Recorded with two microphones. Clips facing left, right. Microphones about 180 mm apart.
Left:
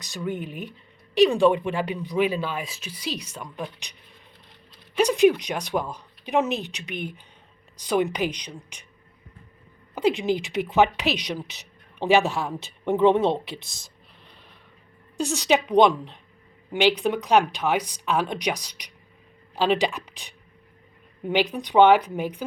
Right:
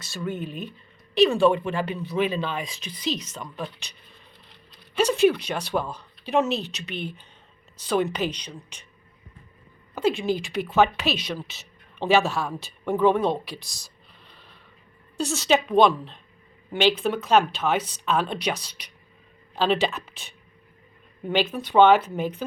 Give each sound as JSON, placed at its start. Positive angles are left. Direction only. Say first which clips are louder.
{"t": 0.0, "sound": "speech", "louder": "left 1 dB", "side_deg": 15}
{"t": 4.9, "sound": "speech", "louder": "left 1 dB", "side_deg": 15}
{"t": 9.9, "sound": "speech", "louder": "left 1 dB", "side_deg": 20}
{"t": 15.2, "sound": "speech", "louder": "even", "side_deg": 15}